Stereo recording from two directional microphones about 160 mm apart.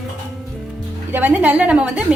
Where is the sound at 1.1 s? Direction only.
10° right (ahead or behind).